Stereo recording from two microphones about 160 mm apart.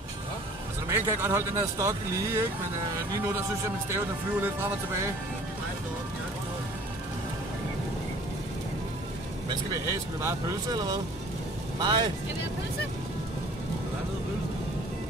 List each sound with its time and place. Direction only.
0.8 s speech: 15° right (ahead or behind)
3.9 s speech: 15° right (ahead or behind)
10.2 s speech: 25° right (ahead or behind)